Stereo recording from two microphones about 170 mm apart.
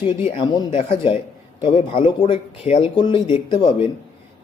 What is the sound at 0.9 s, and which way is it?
A man's voice, 30° left (ahead or behind).